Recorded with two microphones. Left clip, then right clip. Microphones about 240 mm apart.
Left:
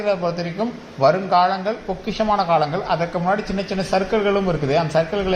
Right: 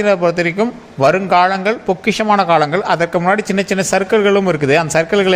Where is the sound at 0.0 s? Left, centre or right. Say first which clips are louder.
Right 8 dB; right.